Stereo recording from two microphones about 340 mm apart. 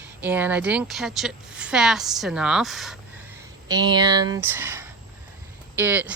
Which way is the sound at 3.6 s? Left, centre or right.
Centre.